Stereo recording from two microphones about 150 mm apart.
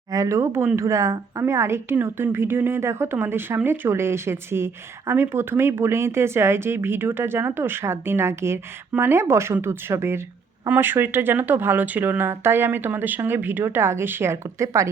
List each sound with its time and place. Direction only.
0.1 s a woman's voice: 20° right (ahead or behind)